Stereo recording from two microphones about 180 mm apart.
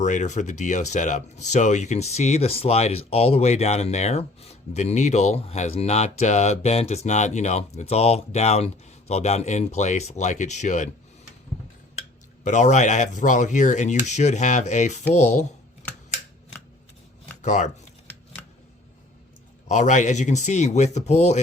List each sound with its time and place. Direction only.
0.0 s speech: 40° left (ahead or behind)
12.4 s speech: 40° left (ahead or behind)
17.4 s speech: 40° left (ahead or behind)
19.6 s speech: 40° left (ahead or behind)